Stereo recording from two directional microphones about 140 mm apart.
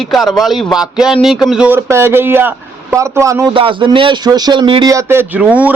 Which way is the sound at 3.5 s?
40° right (ahead or behind).